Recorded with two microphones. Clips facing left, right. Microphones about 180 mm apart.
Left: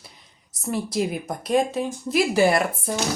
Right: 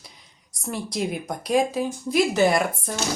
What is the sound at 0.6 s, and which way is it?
Speech, 5° left (ahead or behind).